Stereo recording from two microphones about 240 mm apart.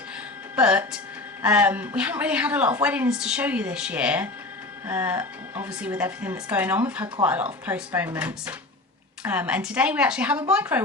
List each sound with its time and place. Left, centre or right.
0.5 s a woman's voice: centre